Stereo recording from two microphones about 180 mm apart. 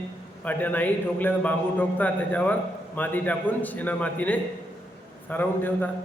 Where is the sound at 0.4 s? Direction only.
10° left (ahead or behind).